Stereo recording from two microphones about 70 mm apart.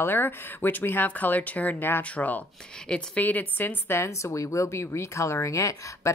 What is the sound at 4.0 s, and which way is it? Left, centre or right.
Speech, left.